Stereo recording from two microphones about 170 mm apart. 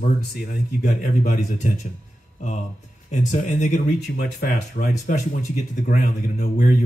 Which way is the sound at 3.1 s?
50° left (ahead or behind).